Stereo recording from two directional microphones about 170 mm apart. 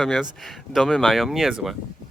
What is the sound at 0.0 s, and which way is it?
Speech, 5° left (ahead or behind).